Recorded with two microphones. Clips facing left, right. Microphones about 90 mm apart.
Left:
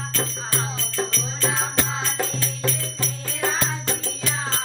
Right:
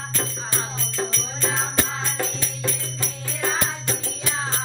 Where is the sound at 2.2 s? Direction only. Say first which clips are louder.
Left 2 dB; 20° right (ahead or behind).